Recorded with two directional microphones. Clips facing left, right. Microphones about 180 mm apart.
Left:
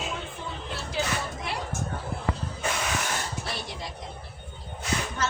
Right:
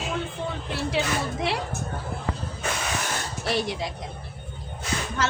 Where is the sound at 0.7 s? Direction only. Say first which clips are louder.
Right 4 dB; 70° right (ahead or behind).